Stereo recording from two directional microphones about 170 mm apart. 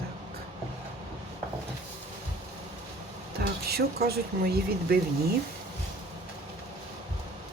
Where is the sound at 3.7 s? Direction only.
65° right (ahead or behind).